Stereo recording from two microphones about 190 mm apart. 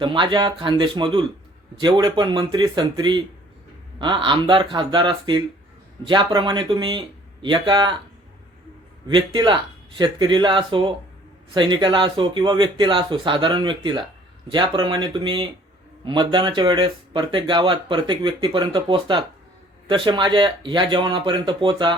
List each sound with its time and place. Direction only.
0.0 s speech: 25° right (ahead or behind)
9.0 s speech: 25° right (ahead or behind)